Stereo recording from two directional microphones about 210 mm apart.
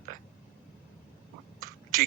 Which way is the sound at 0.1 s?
40° right (ahead or behind).